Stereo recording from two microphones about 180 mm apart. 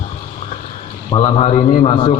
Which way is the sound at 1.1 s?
35° left (ahead or behind).